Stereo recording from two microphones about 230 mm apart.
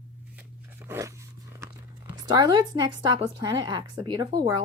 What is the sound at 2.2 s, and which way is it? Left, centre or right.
A woman's voice, centre.